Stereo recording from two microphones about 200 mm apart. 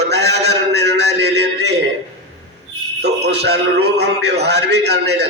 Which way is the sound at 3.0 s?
55° right (ahead or behind).